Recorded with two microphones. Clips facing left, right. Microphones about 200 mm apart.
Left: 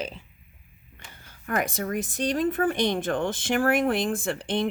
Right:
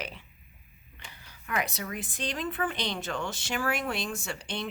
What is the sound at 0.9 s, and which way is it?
Speech, 45° left (ahead or behind).